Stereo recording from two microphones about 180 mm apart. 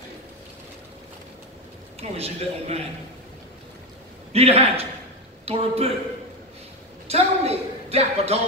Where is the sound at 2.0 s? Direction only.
35° right (ahead or behind).